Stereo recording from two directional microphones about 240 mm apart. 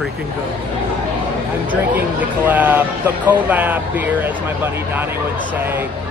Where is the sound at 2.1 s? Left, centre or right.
Centre.